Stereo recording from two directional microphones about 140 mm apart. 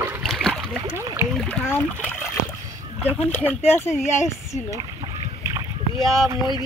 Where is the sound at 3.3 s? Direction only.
10° left (ahead or behind).